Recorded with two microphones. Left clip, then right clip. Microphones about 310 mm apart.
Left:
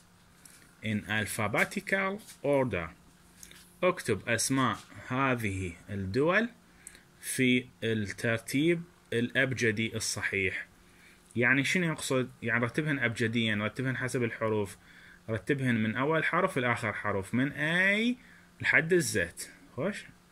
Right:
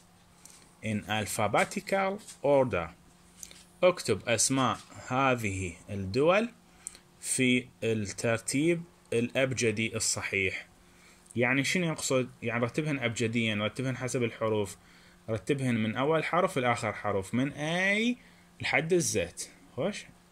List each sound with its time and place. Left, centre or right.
1.0 s speech: centre
3.3 s a sound: centre
4.2 s speech: centre
5.3 s speech: right
6.1 s speech: centre